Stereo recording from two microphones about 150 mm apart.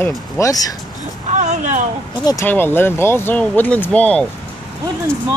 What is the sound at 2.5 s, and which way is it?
Speech, 15° left (ahead or behind).